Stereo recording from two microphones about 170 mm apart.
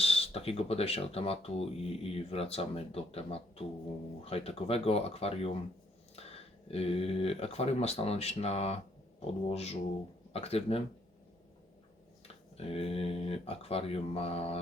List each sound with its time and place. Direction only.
0.0 s speech: 35° left (ahead or behind)
12.5 s speech: 35° left (ahead or behind)